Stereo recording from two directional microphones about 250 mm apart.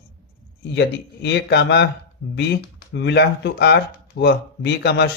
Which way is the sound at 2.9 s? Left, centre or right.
Left.